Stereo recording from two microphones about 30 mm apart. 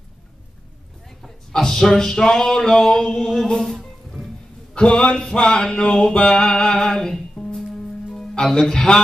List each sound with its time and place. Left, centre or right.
1.5 s speech: left
1.8 s music: centre
4.7 s a man's voice: left
5.3 s a sound: left
6.7 s music: centre
7.4 s music: left
8.5 s a sound: left